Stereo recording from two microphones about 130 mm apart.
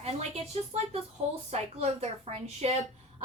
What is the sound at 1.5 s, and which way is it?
A woman's voice, 55° right (ahead or behind).